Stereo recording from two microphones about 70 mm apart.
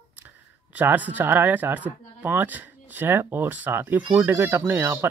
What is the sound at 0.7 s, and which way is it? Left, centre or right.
Speech, right.